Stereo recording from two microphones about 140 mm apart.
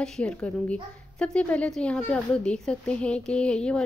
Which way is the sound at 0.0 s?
5° left (ahead or behind).